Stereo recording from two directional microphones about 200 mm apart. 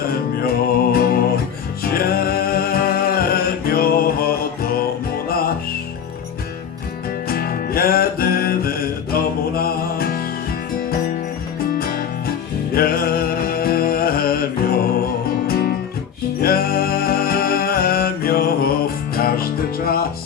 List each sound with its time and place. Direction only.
0.4 s music: 50° left (ahead or behind)
7.3 s music: 50° left (ahead or behind)
11.8 s music: 50° left (ahead or behind)